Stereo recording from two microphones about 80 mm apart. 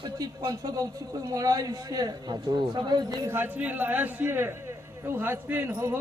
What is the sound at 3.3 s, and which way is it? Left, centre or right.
A man's voice, right.